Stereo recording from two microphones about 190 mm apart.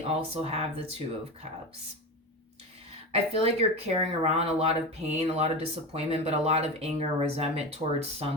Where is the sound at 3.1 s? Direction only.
30° right (ahead or behind).